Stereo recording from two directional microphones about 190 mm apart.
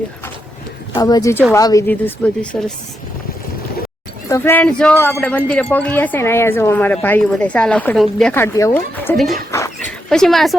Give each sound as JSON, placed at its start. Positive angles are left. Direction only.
{"t": 0.9, "sound": "speech", "side_deg": 20}
{"t": 4.3, "sound": "speech", "side_deg": 15}
{"t": 9.5, "sound": "a sound", "side_deg": 15}
{"t": 10.1, "sound": "speech", "side_deg": 0}